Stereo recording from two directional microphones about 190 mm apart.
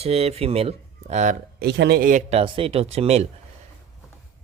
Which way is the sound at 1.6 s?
60° right (ahead or behind).